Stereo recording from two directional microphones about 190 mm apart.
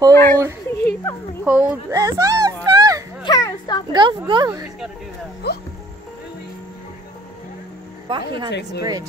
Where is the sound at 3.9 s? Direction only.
25° right (ahead or behind).